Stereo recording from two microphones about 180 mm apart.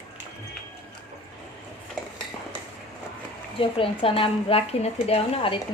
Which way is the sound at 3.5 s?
30° left (ahead or behind).